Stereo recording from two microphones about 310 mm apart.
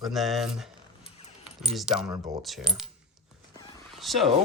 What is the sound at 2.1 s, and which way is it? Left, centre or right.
Coin, centre.